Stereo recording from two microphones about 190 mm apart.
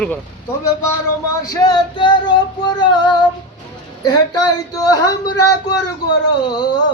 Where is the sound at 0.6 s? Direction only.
15° left (ahead or behind).